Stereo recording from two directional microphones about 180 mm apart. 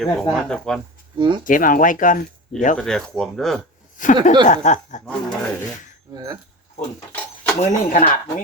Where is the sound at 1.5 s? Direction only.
50° left (ahead or behind).